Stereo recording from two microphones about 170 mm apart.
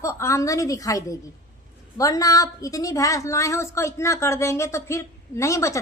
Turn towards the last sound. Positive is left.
turn(degrees=20)  # may be behind; listen again after turning